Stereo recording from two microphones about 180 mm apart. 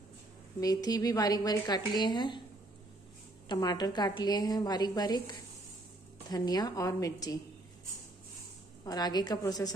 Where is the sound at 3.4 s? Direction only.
25° left (ahead or behind).